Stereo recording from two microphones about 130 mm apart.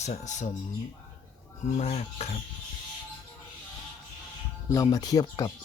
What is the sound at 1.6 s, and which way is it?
Speech, 55° left (ahead or behind).